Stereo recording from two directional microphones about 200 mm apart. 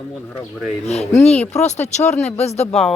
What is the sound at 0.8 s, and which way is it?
Speech, 30° left (ahead or behind).